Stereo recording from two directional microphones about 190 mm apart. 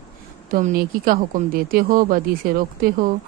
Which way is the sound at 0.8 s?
50° right (ahead or behind).